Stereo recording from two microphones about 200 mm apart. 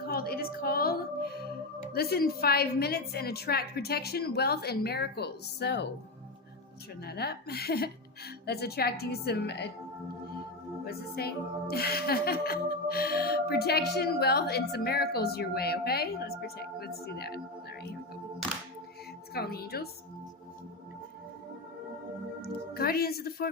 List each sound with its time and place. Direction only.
0.0 s music: 50° left (ahead or behind)
7.0 s music: 50° left (ahead or behind)
10.8 s speech: 50° left (ahead or behind)
11.7 s music: 50° left (ahead or behind)
19.3 s music: 50° left (ahead or behind)
22.4 s music: 50° left (ahead or behind)